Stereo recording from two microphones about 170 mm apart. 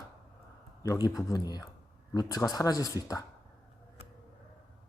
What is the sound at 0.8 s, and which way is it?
A man's voice, 20° left (ahead or behind).